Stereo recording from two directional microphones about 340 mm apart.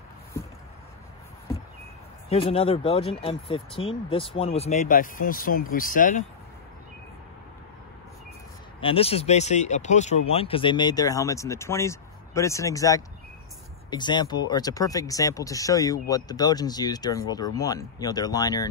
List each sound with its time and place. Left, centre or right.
2.2 s speech: centre
8.8 s speech: centre